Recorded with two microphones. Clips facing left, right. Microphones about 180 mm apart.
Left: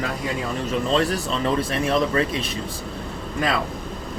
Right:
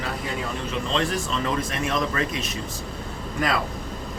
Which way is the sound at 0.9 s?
35° left (ahead or behind).